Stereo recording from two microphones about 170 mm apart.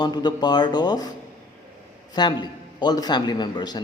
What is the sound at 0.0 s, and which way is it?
A man's voice, 25° left (ahead or behind).